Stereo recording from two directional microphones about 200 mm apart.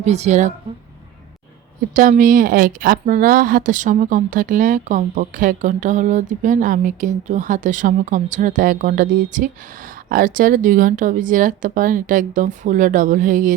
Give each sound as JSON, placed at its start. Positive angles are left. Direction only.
{"t": 0.0, "sound": "speech", "side_deg": -35}
{"t": 1.9, "sound": "speech", "side_deg": -40}